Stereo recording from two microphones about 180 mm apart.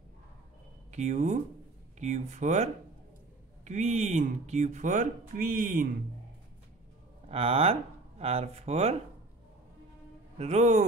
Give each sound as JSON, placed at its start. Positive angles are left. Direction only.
{"t": 0.9, "sound": "speech", "side_deg": -40}
{"t": 7.2, "sound": "speech", "side_deg": -35}
{"t": 10.3, "sound": "speech", "side_deg": -35}